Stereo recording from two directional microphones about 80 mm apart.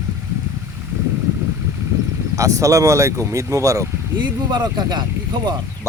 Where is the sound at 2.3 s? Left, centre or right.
Right.